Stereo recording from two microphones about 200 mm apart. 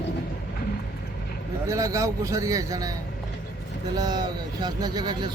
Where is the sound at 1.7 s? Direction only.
15° right (ahead or behind).